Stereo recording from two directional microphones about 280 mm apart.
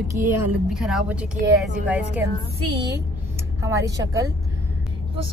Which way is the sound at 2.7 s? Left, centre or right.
Centre.